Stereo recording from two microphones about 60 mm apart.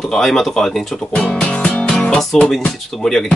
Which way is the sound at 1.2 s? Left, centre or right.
Centre.